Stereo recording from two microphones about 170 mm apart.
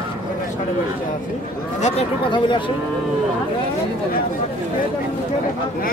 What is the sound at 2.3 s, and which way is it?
Speech, 30° left (ahead or behind).